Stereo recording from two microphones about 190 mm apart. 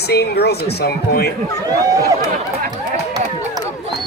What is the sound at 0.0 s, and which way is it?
Speech, 60° left (ahead or behind).